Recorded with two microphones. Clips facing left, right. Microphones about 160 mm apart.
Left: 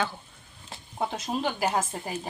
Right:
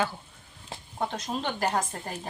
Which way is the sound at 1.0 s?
5° left (ahead or behind).